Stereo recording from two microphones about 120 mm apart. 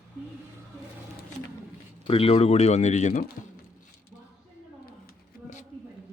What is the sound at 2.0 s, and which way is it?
Speech, 50° left (ahead or behind).